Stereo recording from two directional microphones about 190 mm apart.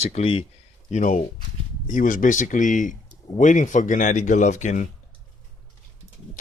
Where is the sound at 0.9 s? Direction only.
45° left (ahead or behind).